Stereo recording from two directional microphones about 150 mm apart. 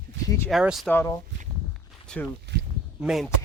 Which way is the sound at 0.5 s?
Centre (ahead or behind).